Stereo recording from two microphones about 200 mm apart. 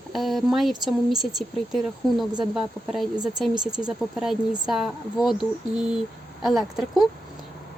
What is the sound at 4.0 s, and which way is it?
Speech, centre (ahead or behind).